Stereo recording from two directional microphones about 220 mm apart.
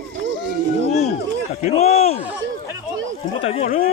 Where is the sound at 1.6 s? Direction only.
30° left (ahead or behind).